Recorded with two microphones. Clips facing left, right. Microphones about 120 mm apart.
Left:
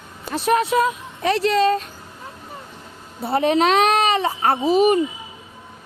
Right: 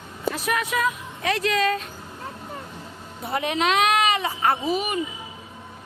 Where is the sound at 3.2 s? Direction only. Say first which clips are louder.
Left 6 dB; 35° left (ahead or behind).